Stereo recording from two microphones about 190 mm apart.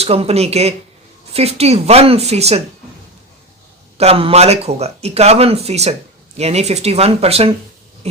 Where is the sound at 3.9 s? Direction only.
30° right (ahead or behind).